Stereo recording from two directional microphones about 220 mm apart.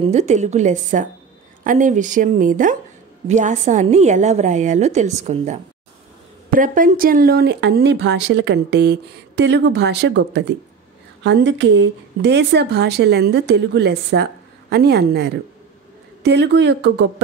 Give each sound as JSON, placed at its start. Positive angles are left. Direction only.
{"t": 0.0, "sound": "a woman's voice", "side_deg": -30}